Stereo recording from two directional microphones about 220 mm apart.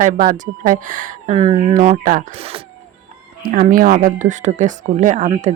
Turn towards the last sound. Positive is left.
turn(degrees=-25)  # may be behind; listen again after turning